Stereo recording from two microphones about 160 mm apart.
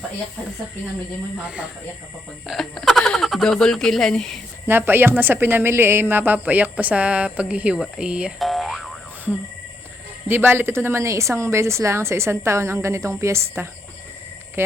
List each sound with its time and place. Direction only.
1.5 s a woman's voice: 5° right (ahead or behind)
4.7 s a woman's voice: 15° right (ahead or behind)
10.2 s a woman's voice: 15° right (ahead or behind)